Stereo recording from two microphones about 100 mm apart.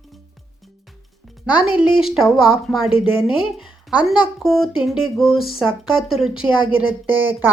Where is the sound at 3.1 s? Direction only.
65° left (ahead or behind).